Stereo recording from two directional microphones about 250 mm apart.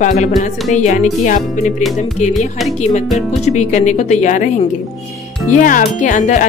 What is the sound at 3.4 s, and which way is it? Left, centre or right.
Speech, left.